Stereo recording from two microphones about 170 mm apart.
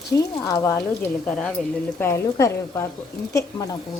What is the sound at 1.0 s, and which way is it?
Speech, 5° left (ahead or behind).